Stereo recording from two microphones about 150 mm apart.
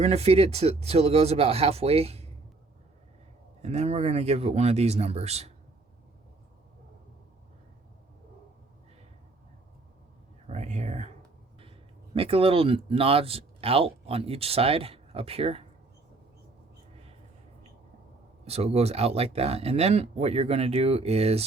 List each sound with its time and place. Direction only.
0.0 s speech: 45° right (ahead or behind)
3.6 s speech: 45° right (ahead or behind)
10.4 s speech: 50° right (ahead or behind)
12.1 s speech: 40° right (ahead or behind)
18.4 s speech: 45° right (ahead or behind)